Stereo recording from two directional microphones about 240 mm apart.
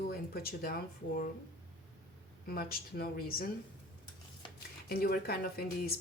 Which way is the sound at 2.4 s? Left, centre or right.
Left.